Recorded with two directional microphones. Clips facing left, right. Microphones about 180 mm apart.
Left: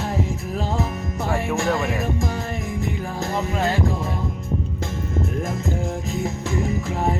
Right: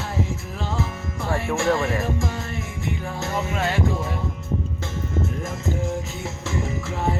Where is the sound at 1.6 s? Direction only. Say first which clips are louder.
Right 1 dB; 15° left (ahead or behind).